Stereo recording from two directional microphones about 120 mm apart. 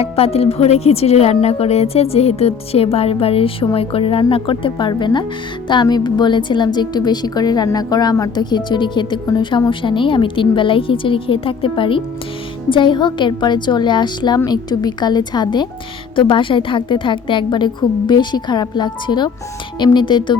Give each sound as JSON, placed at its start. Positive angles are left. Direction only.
{"t": 0.0, "sound": "a woman's voice", "side_deg": 55}